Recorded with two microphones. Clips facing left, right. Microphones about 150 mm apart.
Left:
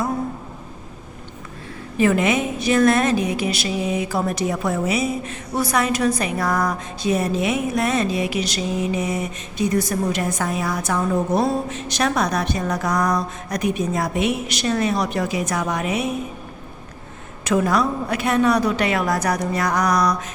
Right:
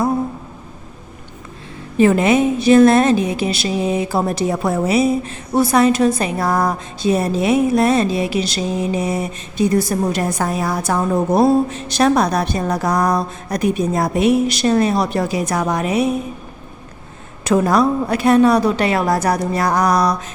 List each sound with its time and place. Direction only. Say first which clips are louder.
2.0 s a woman's voice: right 5 dB; 30° right (ahead or behind)
17.4 s a woman's voice: right 4 dB; 35° right (ahead or behind)